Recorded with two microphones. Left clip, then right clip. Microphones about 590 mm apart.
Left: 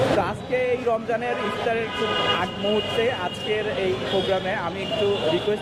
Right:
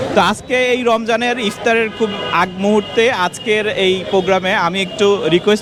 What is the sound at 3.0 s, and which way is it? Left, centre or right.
Speech, right.